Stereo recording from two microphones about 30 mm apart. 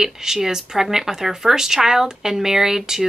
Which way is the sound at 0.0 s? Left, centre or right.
Centre.